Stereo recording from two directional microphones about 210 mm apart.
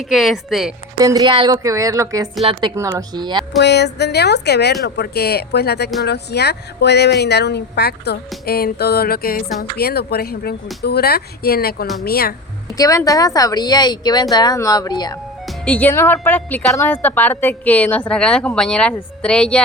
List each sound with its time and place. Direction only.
0.1 s speech: centre (ahead or behind)
0.9 s a woman's voice: 15° right (ahead or behind)
3.6 s speech: 55° left (ahead or behind)
12.7 s a woman's voice: 15° left (ahead or behind)
15.6 s a woman's voice: 10° left (ahead or behind)